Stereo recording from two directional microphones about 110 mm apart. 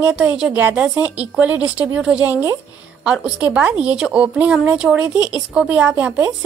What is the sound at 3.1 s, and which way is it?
A woman's voice, 10° right (ahead or behind).